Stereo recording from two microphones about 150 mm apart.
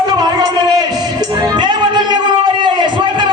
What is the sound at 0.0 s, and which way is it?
Music, 30° right (ahead or behind).